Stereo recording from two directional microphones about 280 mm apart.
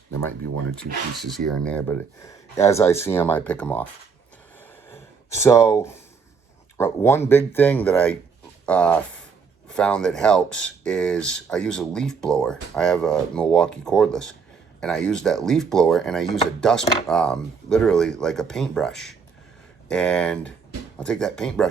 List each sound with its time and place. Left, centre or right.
1.5 s speech: centre
4.9 s a sound: centre
6.7 s speech: centre